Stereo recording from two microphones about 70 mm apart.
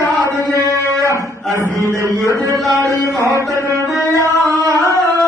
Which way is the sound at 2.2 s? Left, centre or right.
Right.